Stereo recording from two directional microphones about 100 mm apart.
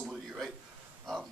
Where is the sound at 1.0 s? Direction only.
Centre (ahead or behind).